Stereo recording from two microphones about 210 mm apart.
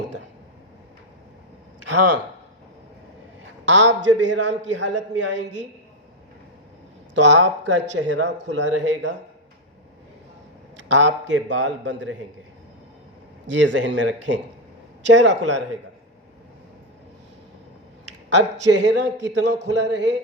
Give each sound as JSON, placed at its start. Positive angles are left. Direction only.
{"t": 3.7, "sound": "speech", "side_deg": -60}
{"t": 7.1, "sound": "speech", "side_deg": -60}
{"t": 10.8, "sound": "speech", "side_deg": -60}
{"t": 13.5, "sound": "speech", "side_deg": -60}
{"t": 18.0, "sound": "speech", "side_deg": -55}